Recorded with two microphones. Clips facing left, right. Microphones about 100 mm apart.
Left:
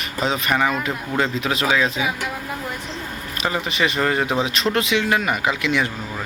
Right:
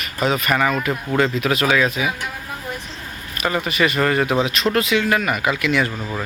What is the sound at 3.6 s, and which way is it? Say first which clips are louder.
Speech: right 2 dB; 20° left (ahead or behind).